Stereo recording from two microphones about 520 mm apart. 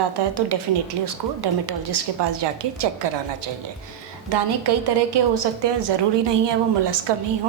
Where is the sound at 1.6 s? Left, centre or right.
Right.